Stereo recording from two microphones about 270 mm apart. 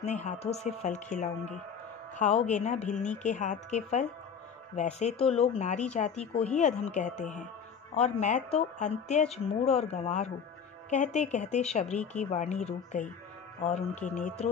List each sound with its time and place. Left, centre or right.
0.0 s speech: left